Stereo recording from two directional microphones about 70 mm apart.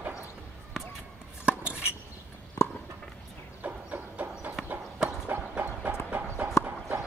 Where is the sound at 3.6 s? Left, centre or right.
Right.